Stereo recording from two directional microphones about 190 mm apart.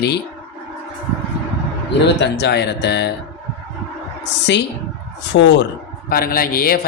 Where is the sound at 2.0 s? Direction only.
65° left (ahead or behind).